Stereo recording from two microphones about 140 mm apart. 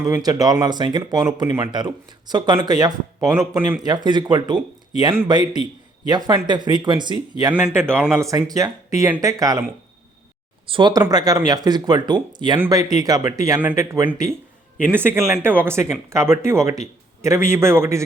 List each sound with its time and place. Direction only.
0.1 s speech: 25° right (ahead or behind)
7.5 s speech: 15° right (ahead or behind)
10.7 s speech: 35° right (ahead or behind); by 18.0 s 20° right (ahead or behind)